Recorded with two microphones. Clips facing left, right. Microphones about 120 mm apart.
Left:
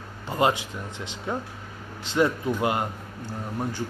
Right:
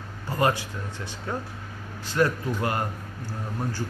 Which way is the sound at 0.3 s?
20° left (ahead or behind).